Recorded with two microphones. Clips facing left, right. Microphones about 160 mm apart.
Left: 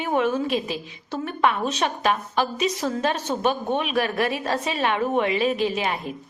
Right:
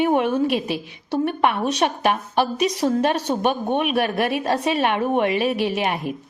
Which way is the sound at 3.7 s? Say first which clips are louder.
Right 3 dB; 55° right (ahead or behind).